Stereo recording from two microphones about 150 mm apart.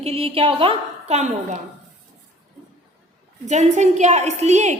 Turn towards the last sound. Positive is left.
turn(degrees=-50)  # may be behind; listen again after turning